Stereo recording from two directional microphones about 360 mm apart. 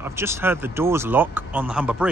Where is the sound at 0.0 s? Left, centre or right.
Centre.